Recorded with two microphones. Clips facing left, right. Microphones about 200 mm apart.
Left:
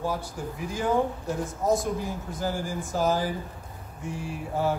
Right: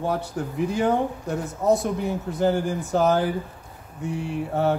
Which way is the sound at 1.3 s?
65° right (ahead or behind).